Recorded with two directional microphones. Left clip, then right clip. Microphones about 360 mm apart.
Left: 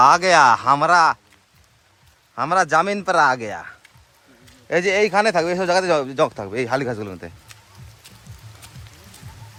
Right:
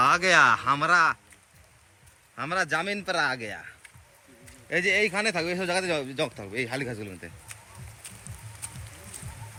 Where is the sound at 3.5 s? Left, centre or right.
Left.